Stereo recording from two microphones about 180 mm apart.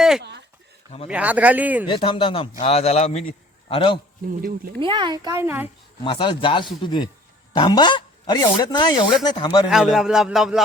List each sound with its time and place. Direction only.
0.2 s a sound: 70° right (ahead or behind)
0.9 s speech: 40° left (ahead or behind)
1.1 s speech: 10° right (ahead or behind)
1.9 s a man's voice: 30° left (ahead or behind)
4.8 s speech: 25° right (ahead or behind)
6.1 s a man's voice: 30° left (ahead or behind)
9.6 s a man's voice: centre (ahead or behind)